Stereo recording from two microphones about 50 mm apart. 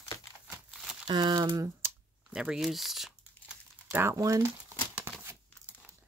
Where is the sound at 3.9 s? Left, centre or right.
Right.